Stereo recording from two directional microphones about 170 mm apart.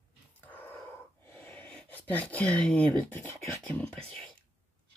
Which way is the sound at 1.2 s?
15° left (ahead or behind).